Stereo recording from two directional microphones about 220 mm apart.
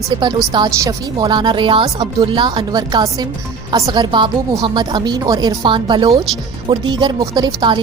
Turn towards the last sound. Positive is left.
turn(degrees=-20)  # may be behind; listen again after turning